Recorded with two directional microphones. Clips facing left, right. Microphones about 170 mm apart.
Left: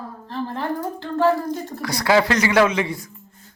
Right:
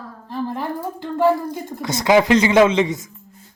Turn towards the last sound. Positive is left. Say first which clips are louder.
# right 4 dB
turn(degrees=-20)  # may be behind; listen again after turning